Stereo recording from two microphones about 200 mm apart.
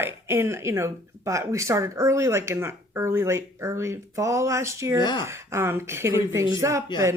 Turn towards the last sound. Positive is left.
turn(degrees=-15)  # may be behind; listen again after turning